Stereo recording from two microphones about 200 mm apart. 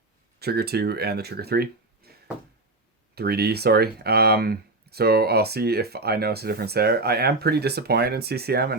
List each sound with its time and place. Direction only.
0.3 s speech: 50° right (ahead or behind)
3.2 s speech: 50° right (ahead or behind)